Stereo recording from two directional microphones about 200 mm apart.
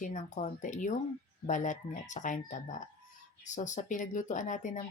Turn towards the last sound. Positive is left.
turn(degrees=40)  # may be behind; listen again after turning